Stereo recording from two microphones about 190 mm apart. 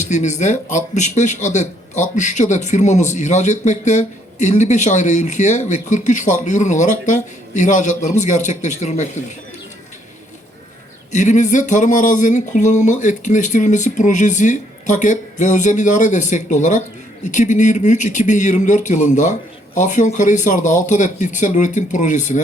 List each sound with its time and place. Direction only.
0.0 s a man's voice: 40° left (ahead or behind)
11.1 s a man's voice: 40° left (ahead or behind)